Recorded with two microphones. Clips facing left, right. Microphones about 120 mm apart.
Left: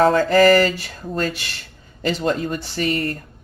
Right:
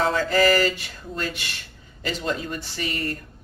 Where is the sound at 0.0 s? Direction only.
45° left (ahead or behind).